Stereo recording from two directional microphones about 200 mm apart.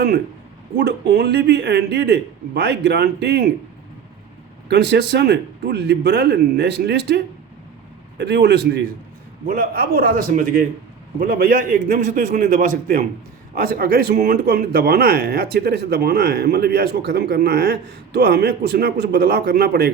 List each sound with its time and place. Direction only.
0.8 s speech: 60° right (ahead or behind)
4.7 s speech: 60° right (ahead or behind)
8.2 s speech: 55° right (ahead or behind)